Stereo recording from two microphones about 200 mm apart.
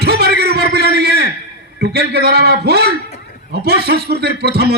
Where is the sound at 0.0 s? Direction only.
55° right (ahead or behind).